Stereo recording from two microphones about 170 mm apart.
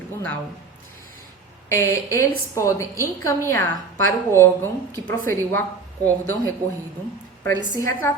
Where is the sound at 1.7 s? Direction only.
15° left (ahead or behind).